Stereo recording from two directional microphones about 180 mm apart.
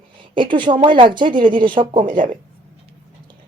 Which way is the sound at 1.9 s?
45° right (ahead or behind).